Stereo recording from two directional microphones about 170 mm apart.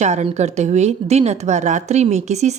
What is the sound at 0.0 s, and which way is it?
Speech, 40° right (ahead or behind).